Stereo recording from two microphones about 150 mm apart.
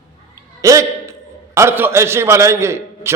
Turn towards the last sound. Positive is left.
turn(degrees=-15)  # may be behind; listen again after turning